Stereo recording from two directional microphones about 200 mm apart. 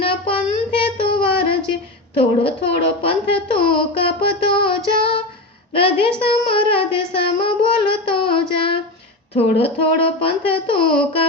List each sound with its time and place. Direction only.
0.0 s child singing: 25° left (ahead or behind)
2.1 s speech: 30° left (ahead or behind)
3.5 s child singing: 25° left (ahead or behind)
5.7 s a woman's voice: 25° left (ahead or behind)
6.5 s a sound: 25° left (ahead or behind)
9.3 s speech: 30° left (ahead or behind)